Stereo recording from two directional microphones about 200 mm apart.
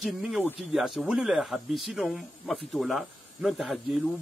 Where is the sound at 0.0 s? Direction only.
Centre (ahead or behind).